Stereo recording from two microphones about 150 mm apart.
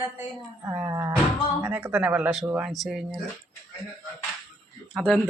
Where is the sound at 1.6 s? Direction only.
15° right (ahead or behind).